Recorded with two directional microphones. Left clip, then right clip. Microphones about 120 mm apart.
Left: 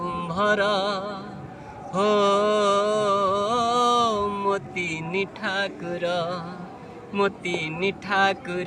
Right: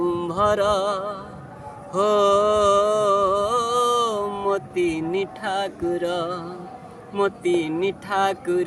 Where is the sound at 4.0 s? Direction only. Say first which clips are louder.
Even; 40° right (ahead or behind).